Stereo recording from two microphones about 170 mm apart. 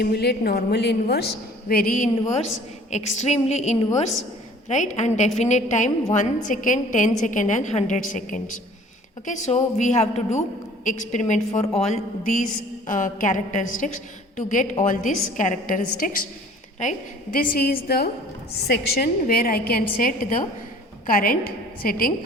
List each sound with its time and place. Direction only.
0.0 s a woman's voice: 70° left (ahead or behind); by 2.0 s 55° left (ahead or behind)
2.9 s a woman's voice: 40° left (ahead or behind)
17.3 s a woman's voice: 55° left (ahead or behind)